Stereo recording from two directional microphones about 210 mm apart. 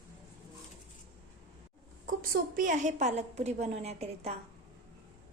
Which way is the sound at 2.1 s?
40° right (ahead or behind).